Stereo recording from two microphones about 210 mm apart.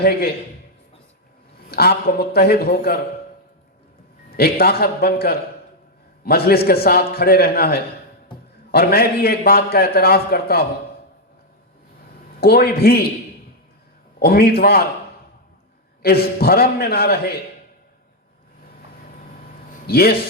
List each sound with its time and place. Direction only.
0.0 s a man's voice: 50° left (ahead or behind)
1.7 s a man's voice: 50° left (ahead or behind)
4.4 s a man's voice: 45° left (ahead or behind)
12.4 s a man's voice: 50° left (ahead or behind)
14.2 s a man's voice: 45° left (ahead or behind)
16.0 s a man's voice: 45° left (ahead or behind)
19.9 s a man's voice: 50° left (ahead or behind)